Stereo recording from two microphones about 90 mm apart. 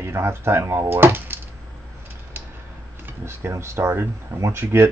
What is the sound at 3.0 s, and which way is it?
Speech, 30° right (ahead or behind).